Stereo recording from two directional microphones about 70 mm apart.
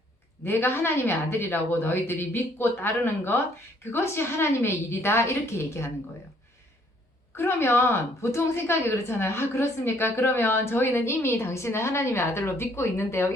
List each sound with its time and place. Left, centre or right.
0.4 s a woman's voice: left
7.3 s a woman's voice: left